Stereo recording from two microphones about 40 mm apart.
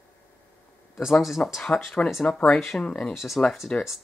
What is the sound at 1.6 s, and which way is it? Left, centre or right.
Speech, centre.